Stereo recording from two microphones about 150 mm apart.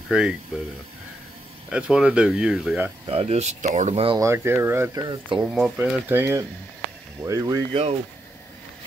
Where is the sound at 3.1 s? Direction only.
45° right (ahead or behind).